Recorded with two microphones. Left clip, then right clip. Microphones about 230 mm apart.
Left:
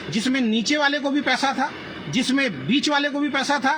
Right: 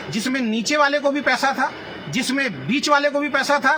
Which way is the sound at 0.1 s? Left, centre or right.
Right.